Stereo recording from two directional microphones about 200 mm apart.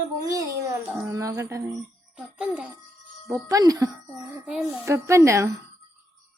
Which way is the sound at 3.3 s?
15° right (ahead or behind).